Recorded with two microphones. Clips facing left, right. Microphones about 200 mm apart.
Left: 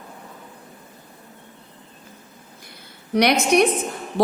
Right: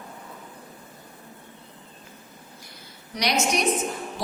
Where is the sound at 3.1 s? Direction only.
60° left (ahead or behind).